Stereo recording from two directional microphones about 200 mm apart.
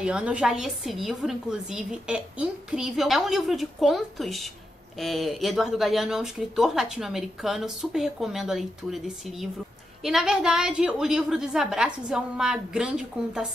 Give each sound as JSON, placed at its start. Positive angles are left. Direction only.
{"t": 0.0, "sound": "speech", "side_deg": -5}